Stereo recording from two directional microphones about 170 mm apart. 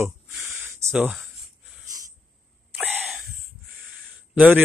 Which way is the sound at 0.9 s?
5° right (ahead or behind).